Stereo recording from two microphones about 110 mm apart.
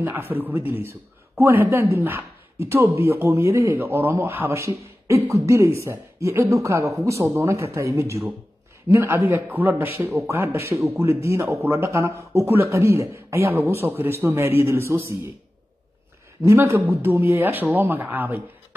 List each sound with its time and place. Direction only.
0.0 s a man's voice: 20° right (ahead or behind)
16.4 s a man's voice: 25° right (ahead or behind)